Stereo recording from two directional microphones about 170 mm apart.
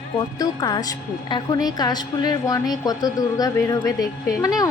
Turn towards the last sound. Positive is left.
turn(degrees=20)  # may be behind; listen again after turning